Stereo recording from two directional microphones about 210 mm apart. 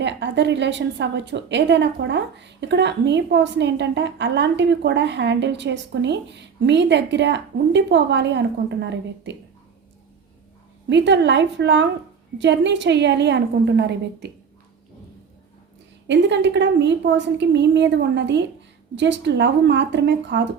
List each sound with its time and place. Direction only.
0.0 s a woman's voice: 55° right (ahead or behind)
10.8 s a woman's voice: 55° right (ahead or behind)
16.0 s a woman's voice: 55° right (ahead or behind)